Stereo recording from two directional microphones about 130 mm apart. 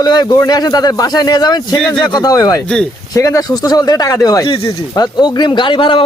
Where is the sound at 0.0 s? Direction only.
30° left (ahead or behind).